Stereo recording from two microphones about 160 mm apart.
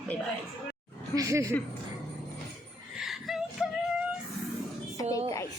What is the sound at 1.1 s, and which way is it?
Speech, 20° right (ahead or behind).